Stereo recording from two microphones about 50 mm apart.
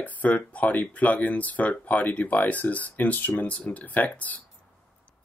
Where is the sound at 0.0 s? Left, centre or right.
Left.